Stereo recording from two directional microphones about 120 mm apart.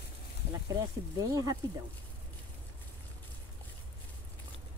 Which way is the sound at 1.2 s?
30° right (ahead or behind).